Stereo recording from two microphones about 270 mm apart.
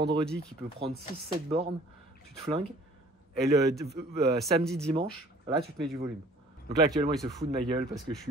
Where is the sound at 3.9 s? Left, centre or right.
Right.